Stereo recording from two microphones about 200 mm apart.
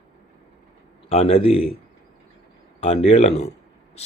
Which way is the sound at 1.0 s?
30° left (ahead or behind).